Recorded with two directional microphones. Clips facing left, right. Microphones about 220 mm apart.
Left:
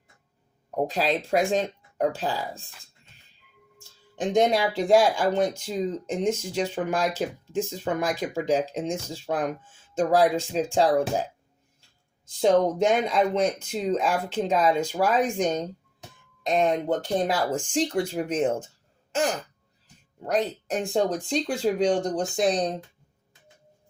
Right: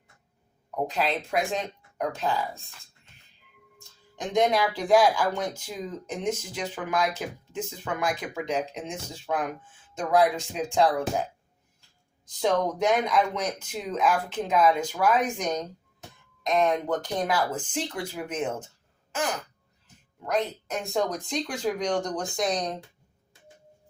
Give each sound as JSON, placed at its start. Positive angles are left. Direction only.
{"t": 0.9, "sound": "speech", "side_deg": 35}
{"t": 3.8, "sound": "speech", "side_deg": 30}
{"t": 12.4, "sound": "speech", "side_deg": 25}
{"t": 20.2, "sound": "speech", "side_deg": 30}